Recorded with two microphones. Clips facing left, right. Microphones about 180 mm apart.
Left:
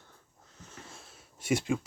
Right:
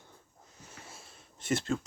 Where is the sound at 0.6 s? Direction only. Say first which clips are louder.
Left 2 dB; 10° right (ahead or behind).